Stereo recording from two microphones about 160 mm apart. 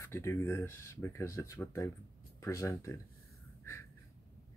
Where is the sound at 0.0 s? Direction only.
15° left (ahead or behind).